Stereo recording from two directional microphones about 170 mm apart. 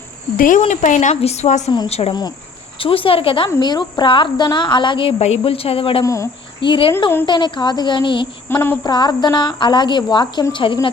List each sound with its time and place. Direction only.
0.3 s a woman's voice: 50° left (ahead or behind); by 8.3 s 30° left (ahead or behind)
8.4 s a sound: 15° left (ahead or behind)
8.8 s speech: 25° left (ahead or behind)